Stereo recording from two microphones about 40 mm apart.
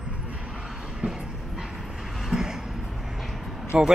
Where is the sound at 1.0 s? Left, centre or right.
Centre.